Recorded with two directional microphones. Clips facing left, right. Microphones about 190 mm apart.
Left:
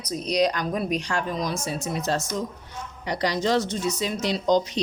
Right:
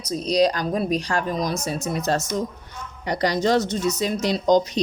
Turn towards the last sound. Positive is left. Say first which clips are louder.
# right 3 dB
turn(degrees=-45)  # may be behind; listen again after turning